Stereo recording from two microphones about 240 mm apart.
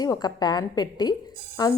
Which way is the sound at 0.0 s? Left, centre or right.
Centre.